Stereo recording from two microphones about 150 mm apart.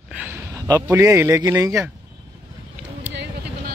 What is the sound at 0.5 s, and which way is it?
Speech, 20° right (ahead or behind).